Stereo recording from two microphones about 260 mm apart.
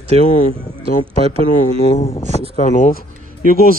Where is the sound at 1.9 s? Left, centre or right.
Left.